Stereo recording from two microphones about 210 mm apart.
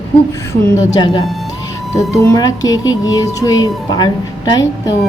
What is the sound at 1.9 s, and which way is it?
A woman's voice, 15° left (ahead or behind).